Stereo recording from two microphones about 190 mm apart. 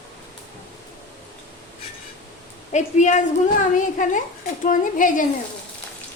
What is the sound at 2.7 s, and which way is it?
A woman's voice, 40° left (ahead or behind).